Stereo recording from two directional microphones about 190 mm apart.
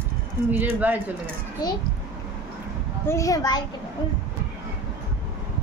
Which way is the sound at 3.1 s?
15° left (ahead or behind).